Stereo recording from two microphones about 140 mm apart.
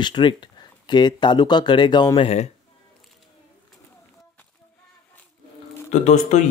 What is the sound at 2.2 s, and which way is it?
Speech, 50° left (ahead or behind).